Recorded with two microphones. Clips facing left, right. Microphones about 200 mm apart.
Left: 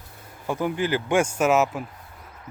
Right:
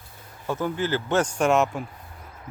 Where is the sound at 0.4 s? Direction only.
10° left (ahead or behind).